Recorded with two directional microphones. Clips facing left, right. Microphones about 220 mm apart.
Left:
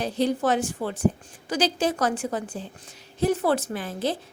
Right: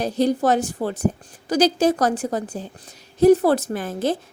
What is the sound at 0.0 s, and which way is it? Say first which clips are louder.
A woman's voice: right 4 dB; 40° right (ahead or behind).